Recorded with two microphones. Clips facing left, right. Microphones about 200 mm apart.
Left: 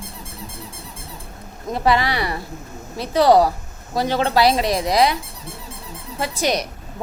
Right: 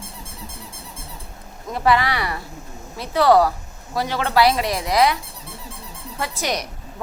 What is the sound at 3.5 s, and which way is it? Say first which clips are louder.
Speech: left 1 dB; 40° left (ahead or behind).